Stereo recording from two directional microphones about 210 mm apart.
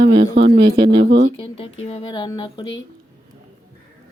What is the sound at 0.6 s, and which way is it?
Speech, 20° right (ahead or behind).